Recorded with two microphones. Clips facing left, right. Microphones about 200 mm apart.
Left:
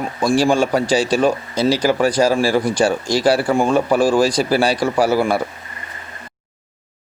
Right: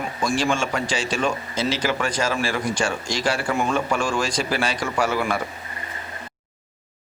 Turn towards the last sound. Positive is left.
turn(degrees=35)  # may be behind; listen again after turning